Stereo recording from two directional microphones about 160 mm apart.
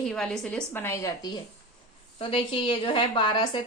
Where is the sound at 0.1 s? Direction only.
5° left (ahead or behind).